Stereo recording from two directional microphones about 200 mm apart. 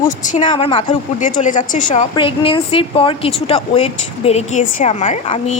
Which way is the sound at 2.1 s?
25° left (ahead or behind).